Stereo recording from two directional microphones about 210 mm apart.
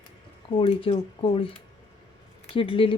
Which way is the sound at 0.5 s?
25° left (ahead or behind).